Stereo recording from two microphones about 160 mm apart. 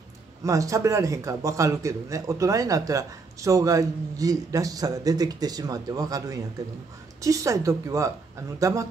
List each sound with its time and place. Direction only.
0.4 s a man's voice: 20° right (ahead or behind)